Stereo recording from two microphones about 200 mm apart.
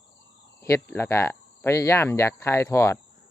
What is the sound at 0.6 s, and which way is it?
Speech, 15° left (ahead or behind).